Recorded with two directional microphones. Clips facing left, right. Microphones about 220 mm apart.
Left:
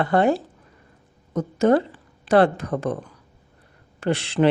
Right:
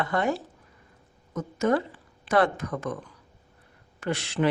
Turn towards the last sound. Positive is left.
turn(degrees=30)  # may be behind; listen again after turning